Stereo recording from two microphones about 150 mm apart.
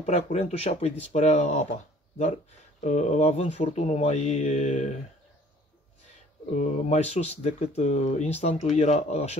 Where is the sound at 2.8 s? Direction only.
50° left (ahead or behind).